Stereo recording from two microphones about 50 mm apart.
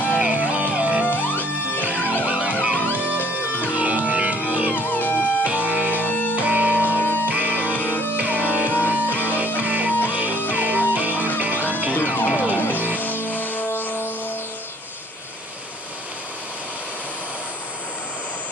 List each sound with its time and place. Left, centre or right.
0.2 s music: right
1.0 s music: left
1.9 s music: right
2.8 s music: left
3.7 s music: right
4.7 s music: left
5.4 s music: right
6.0 s music: left
6.3 s music: right
7.0 s music: left
7.2 s music: right
8.6 s music: left
8.9 s music: right
12.5 s music: left